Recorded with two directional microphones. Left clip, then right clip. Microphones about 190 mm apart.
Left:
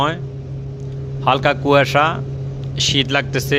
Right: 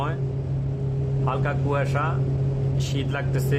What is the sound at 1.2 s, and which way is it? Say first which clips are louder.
A man's voice: left 13 dB; 45° left (ahead or behind).